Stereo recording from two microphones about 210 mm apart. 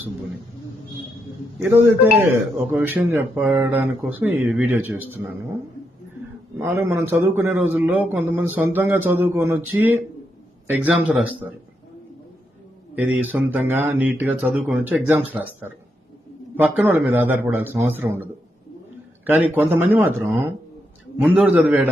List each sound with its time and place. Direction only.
2.7 s a man's voice: 10° right (ahead or behind)
6.6 s a man's voice: 10° right (ahead or behind)
13.0 s a man's voice: 10° right (ahead or behind)